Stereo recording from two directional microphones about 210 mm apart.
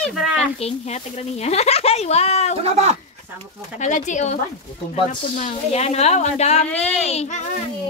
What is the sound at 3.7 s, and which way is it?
A woman's voice, 35° left (ahead or behind).